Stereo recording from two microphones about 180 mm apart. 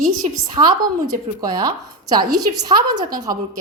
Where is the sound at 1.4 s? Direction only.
20° right (ahead or behind).